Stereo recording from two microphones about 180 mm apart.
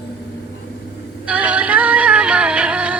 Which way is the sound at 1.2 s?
5° right (ahead or behind).